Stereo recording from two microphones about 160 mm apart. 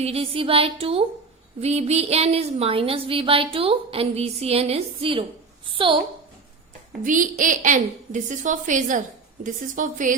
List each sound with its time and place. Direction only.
0.0 s speech: 40° right (ahead or behind)
7.0 s a woman's voice: 55° right (ahead or behind)